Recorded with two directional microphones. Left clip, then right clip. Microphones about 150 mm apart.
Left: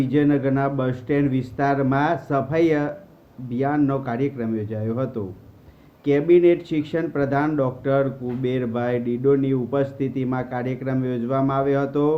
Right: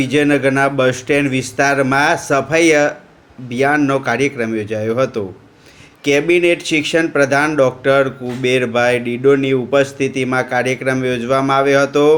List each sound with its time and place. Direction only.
0.0 s speech: 15° right (ahead or behind)